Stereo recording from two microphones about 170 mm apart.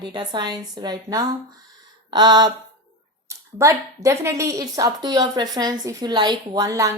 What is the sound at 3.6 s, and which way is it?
A woman's voice, 20° right (ahead or behind).